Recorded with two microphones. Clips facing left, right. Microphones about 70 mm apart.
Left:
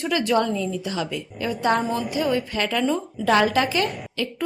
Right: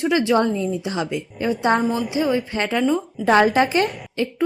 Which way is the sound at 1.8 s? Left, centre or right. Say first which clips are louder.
Right 3 dB; centre.